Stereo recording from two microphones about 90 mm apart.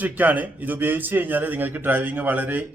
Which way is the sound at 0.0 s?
20° right (ahead or behind).